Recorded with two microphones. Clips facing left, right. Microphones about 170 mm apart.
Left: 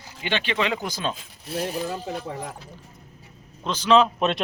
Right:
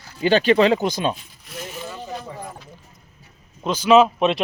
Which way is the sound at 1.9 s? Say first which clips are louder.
Left 2 dB; 80° left.